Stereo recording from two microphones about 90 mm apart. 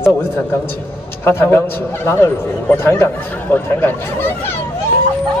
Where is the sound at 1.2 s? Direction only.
30° left (ahead or behind).